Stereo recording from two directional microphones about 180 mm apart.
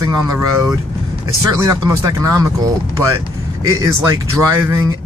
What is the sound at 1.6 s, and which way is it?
Speech, 20° right (ahead or behind).